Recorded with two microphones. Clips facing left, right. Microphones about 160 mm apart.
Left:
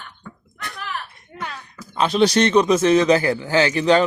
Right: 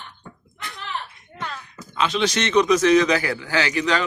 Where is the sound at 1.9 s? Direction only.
35° left (ahead or behind).